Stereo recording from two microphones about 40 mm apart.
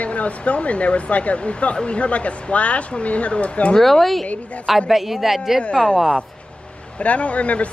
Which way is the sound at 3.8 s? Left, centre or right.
Centre.